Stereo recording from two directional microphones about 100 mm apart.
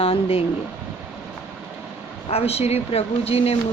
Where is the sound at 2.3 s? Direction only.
90° left.